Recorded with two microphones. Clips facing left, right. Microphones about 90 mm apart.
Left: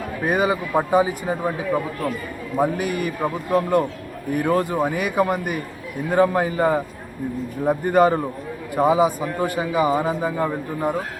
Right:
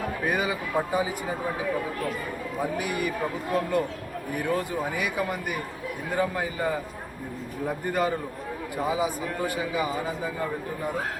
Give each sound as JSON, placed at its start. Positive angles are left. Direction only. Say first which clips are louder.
{"t": 0.3, "sound": "a man's voice", "louder": "left 9 dB", "side_deg": 35}
{"t": 2.6, "sound": "a man's voice", "louder": "left 7 dB", "side_deg": 50}